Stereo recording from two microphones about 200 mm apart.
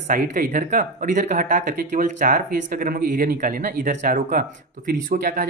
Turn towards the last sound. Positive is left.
turn(degrees=-40)  # may be behind; listen again after turning